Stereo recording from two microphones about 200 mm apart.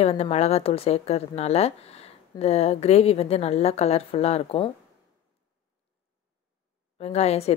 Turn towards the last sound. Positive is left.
turn(degrees=30)  # may be behind; listen again after turning